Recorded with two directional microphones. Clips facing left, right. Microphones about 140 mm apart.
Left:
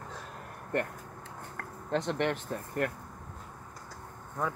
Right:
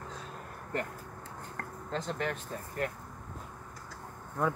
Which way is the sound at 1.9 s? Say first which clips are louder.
Left 5 dB; 70° left (ahead or behind).